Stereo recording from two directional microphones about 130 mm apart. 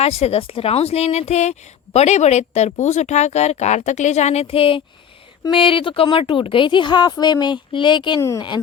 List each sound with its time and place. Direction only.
0.0 s a woman's voice: 55° left (ahead or behind); by 8.6 s 35° left (ahead or behind)